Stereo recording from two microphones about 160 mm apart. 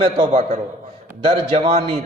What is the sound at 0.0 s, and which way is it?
A man's voice, 40° right (ahead or behind).